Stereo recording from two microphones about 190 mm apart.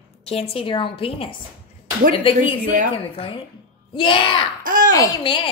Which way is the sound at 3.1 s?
25° left (ahead or behind).